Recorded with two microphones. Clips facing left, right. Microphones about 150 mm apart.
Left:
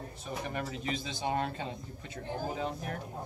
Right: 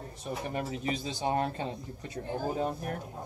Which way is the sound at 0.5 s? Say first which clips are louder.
Right 3 dB; 35° right (ahead or behind).